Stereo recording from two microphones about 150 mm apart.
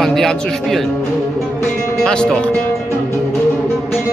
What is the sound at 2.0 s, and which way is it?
Speech, 5° left (ahead or behind).